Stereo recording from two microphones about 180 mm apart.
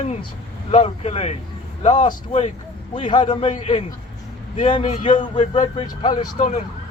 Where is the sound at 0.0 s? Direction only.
40° left (ahead or behind).